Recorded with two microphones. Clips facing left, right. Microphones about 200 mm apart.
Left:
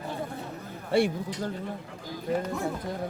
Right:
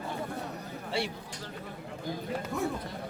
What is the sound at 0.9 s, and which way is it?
Speech, 50° left (ahead or behind).